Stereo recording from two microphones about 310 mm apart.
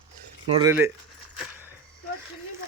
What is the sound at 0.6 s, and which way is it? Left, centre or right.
Speech, centre.